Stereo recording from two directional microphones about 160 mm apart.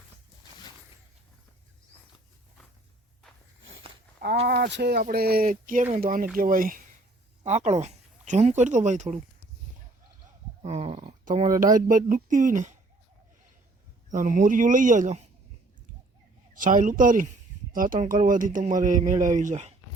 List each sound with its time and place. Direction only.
4.4 s speech: 90° right
5.0 s speech: 70° right (ahead or behind)
7.4 s speech: 45° right (ahead or behind)
10.6 s a sound: 40° right (ahead or behind)
11.5 s speech: 55° right (ahead or behind)
14.1 s speech: 50° right (ahead or behind)
16.6 s speech: 55° right (ahead or behind)